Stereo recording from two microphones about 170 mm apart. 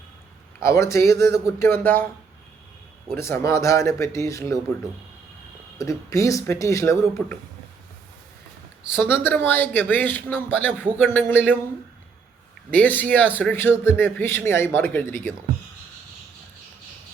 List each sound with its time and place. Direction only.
0.6 s a man's voice: 15° left (ahead or behind)
3.1 s a man's voice: 15° left (ahead or behind)
5.7 s speech: 20° left (ahead or behind)
8.9 s a man's voice: 15° left (ahead or behind)
12.7 s a man's voice: 10° left (ahead or behind)